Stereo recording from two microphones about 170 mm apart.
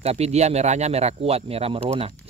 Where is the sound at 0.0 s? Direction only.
40° right (ahead or behind).